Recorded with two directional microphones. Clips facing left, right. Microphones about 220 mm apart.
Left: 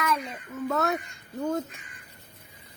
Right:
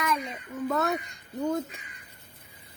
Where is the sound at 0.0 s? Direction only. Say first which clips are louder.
Left 1 dB; centre (ahead or behind).